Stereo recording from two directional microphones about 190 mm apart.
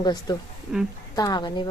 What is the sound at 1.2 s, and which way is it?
Speech, 20° left (ahead or behind).